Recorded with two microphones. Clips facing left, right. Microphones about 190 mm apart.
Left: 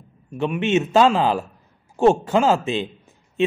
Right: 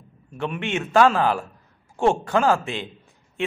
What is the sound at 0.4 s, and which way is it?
A man's voice, 15° left (ahead or behind).